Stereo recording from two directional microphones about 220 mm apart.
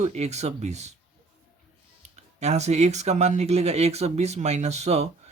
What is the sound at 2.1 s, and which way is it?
Speech, 30° right (ahead or behind).